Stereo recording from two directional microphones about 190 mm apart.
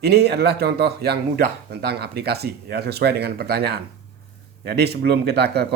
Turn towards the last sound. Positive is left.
turn(degrees=-60)  # may be behind; listen again after turning